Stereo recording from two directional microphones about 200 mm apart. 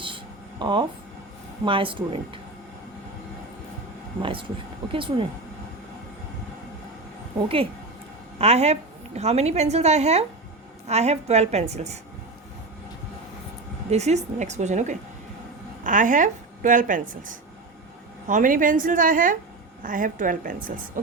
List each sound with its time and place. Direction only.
0.6 s speech: 25° right (ahead or behind)
4.2 s speech: 25° right (ahead or behind)
7.4 s a woman's voice: 25° right (ahead or behind)
13.9 s a woman's voice: 35° right (ahead or behind)